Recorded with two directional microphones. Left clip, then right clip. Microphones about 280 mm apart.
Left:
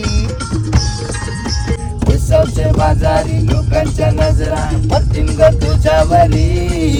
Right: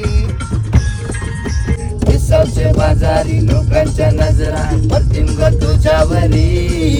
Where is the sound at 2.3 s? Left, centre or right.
Centre.